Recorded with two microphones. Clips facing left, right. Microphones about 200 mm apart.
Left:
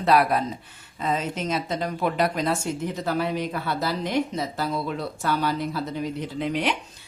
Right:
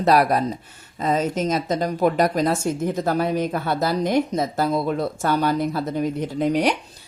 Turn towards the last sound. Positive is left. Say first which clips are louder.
# right 6 dB
turn(degrees=-40)  # may be behind; listen again after turning